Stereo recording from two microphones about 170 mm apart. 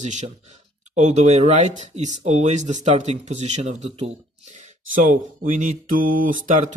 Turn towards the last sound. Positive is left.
turn(degrees=-50)  # may be behind; listen again after turning